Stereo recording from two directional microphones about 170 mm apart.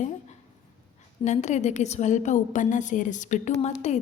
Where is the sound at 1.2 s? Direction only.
45° left (ahead or behind).